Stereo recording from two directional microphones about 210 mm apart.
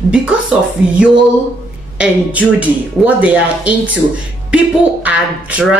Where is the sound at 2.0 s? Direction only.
5° right (ahead or behind).